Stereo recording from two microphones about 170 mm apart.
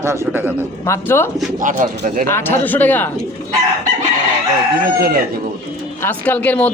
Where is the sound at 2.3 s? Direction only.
10° left (ahead or behind).